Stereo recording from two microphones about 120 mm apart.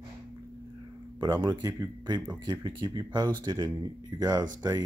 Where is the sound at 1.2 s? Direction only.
35° right (ahead or behind).